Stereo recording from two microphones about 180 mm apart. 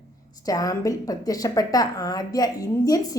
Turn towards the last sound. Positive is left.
turn(degrees=20)  # may be behind; listen again after turning